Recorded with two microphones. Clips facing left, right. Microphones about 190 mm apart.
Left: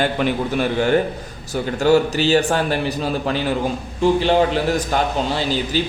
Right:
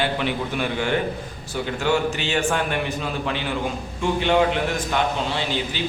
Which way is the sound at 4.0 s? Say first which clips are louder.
Left 4 dB; 35° left (ahead or behind).